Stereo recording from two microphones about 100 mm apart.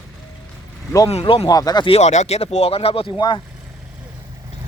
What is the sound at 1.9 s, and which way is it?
Speech, 85° left.